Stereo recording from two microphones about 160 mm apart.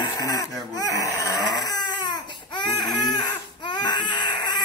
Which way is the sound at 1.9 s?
30° left (ahead or behind).